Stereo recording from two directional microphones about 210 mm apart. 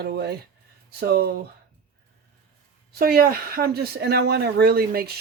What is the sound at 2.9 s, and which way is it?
Speech, 45° right (ahead or behind).